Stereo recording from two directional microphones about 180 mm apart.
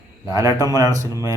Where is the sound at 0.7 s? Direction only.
20° right (ahead or behind).